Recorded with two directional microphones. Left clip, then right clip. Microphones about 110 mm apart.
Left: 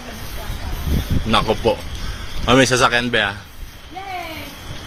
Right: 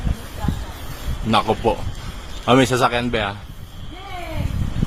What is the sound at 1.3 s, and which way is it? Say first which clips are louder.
Speech: left 1 dB; 20° right (ahead or behind).